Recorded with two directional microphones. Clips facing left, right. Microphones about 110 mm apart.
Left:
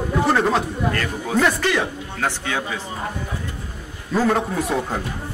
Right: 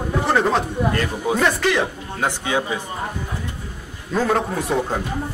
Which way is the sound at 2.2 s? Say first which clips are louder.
Right 3 dB; 15° right (ahead or behind).